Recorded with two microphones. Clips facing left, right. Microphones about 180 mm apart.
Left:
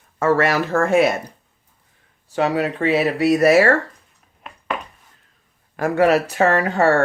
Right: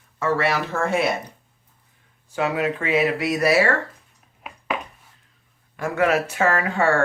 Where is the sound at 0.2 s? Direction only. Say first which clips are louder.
Left 5 dB; 45° left (ahead or behind).